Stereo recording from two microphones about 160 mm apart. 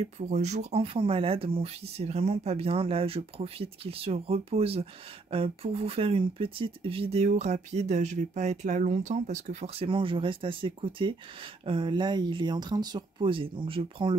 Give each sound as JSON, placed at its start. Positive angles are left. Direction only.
{"t": 0.0, "sound": "speech", "side_deg": -45}
{"t": 9.8, "sound": "speech", "side_deg": -35}